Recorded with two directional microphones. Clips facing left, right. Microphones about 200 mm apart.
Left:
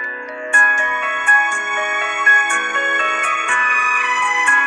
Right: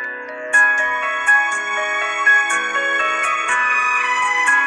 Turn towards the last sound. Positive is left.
turn(degrees=60)  # may be behind; listen again after turning